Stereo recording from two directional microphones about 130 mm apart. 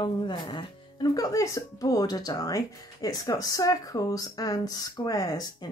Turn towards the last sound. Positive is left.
turn(degrees=30)  # may be behind; listen again after turning